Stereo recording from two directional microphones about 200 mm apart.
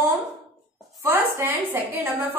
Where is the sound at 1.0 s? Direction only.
10° right (ahead or behind).